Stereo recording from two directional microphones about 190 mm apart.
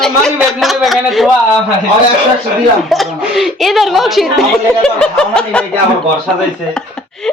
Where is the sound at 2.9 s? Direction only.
Centre (ahead or behind).